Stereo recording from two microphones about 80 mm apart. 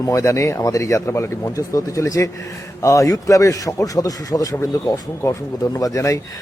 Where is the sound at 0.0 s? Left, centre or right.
Left.